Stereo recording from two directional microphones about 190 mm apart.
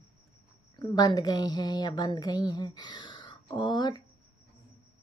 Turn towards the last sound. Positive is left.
turn(degrees=20)  # may be behind; listen again after turning